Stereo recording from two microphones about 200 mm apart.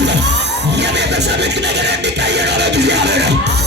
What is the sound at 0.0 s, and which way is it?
Music, 60° right (ahead or behind).